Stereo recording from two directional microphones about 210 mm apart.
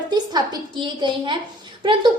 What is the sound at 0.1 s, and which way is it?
A woman's voice, 20° right (ahead or behind).